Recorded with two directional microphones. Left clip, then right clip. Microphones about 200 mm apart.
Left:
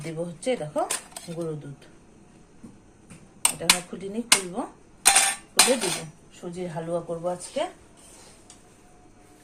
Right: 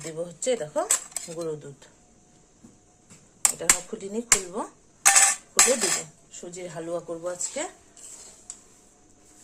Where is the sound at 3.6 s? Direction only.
30° right (ahead or behind).